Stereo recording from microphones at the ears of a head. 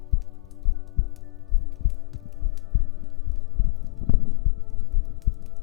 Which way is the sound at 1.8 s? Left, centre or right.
Left.